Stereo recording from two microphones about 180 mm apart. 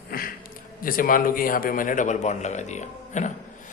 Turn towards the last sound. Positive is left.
turn(degrees=40)  # may be behind; listen again after turning